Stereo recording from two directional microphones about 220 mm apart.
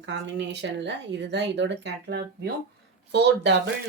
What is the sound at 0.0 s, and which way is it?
Speech, 55° right (ahead or behind).